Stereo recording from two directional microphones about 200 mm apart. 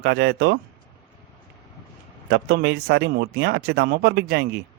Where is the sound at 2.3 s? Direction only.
55° right (ahead or behind).